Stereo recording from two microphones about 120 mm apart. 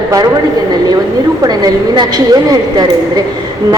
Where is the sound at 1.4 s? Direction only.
35° right (ahead or behind).